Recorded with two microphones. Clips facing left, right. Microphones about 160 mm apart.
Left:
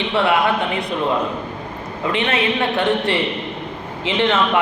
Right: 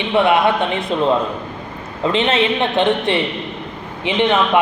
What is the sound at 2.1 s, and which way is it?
A man's voice, 25° right (ahead or behind).